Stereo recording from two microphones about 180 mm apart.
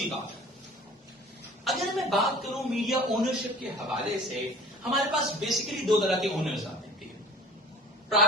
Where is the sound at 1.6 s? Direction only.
Centre (ahead or behind).